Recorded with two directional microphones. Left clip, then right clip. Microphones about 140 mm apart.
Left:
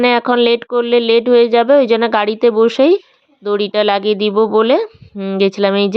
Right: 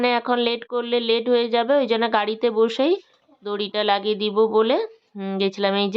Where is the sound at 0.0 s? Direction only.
55° left (ahead or behind).